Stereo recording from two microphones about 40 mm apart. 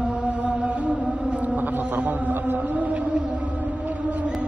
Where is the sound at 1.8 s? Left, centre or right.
Right.